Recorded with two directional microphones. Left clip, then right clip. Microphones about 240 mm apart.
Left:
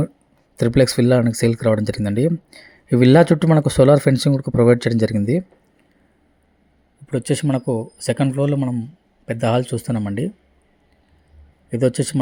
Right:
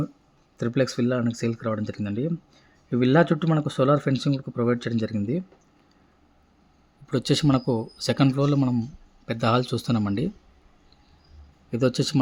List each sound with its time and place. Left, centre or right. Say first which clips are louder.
0.5 s speech: left 9 dB; centre
7.1 s speech: left 2 dB; centre
11.7 s a man's voice: left 4 dB; centre